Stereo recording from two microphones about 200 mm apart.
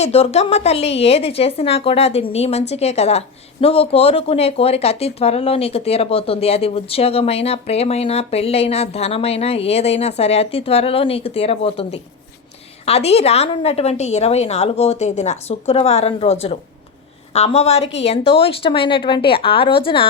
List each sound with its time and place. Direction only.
0.0 s a woman's voice: 30° left (ahead or behind)